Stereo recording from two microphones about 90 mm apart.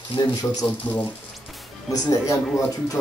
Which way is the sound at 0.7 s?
20° left (ahead or behind).